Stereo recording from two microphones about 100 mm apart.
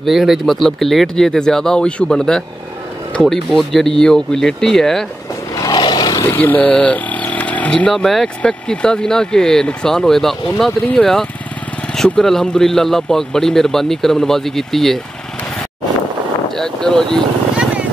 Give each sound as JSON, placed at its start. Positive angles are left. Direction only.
{"t": 0.0, "sound": "speech", "side_deg": 0}
{"t": 5.7, "sound": "roar", "side_deg": 45}
{"t": 6.3, "sound": "speech", "side_deg": 20}
{"t": 16.4, "sound": "speech", "side_deg": 5}